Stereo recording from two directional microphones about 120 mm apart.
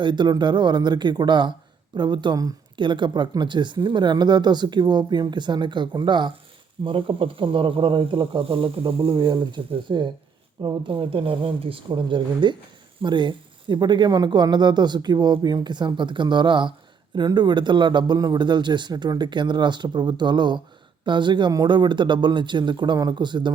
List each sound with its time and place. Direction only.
0.0 s speech: 40° right (ahead or behind)